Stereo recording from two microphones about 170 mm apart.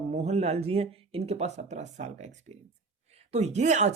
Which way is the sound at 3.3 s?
40° right (ahead or behind).